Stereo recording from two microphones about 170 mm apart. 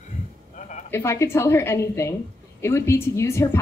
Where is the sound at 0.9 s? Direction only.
15° left (ahead or behind).